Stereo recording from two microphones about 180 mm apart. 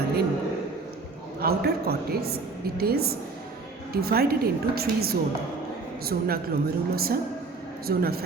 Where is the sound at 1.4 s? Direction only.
60° right (ahead or behind).